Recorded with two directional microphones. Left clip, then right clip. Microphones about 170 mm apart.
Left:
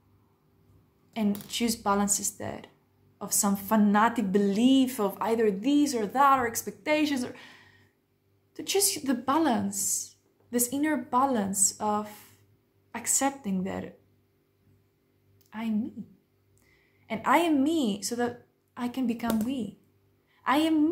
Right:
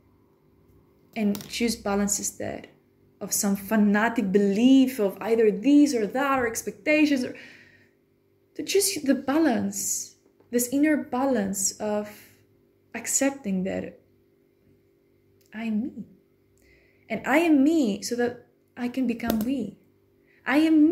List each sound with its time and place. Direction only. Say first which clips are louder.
1.1 s a woman's voice: right 2 dB; 15° left (ahead or behind)
17.1 s a woman's voice: right 2 dB; 15° left (ahead or behind)
20.4 s a woman's voice: right 3 dB; 15° left (ahead or behind)